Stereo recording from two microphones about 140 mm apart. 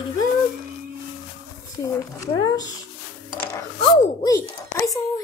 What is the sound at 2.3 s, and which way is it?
Cat, 25° left (ahead or behind).